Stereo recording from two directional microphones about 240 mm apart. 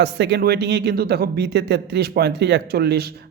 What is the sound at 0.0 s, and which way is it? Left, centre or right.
A man's voice, right.